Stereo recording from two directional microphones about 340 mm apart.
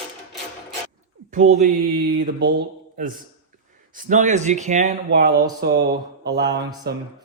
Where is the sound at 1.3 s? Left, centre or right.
Right.